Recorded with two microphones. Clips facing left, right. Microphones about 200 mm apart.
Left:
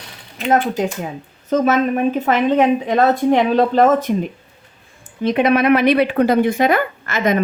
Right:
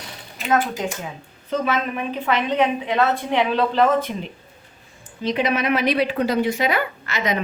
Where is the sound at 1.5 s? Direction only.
45° left (ahead or behind).